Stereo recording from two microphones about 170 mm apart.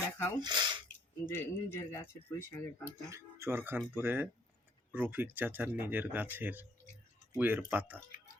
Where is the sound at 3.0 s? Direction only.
15° right (ahead or behind).